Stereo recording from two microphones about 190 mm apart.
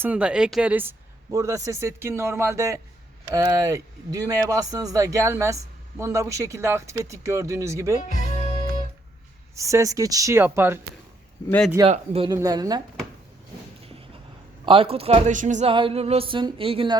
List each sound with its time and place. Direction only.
0.0 s speech: 5° right (ahead or behind)
8.0 s music: 40° left (ahead or behind)
9.6 s speech: 15° right (ahead or behind)
11.9 s speech: 30° right (ahead or behind)
12.3 s a sound: 20° right (ahead or behind)
14.6 s speech: 25° right (ahead or behind)
15.7 s a sound: 30° right (ahead or behind)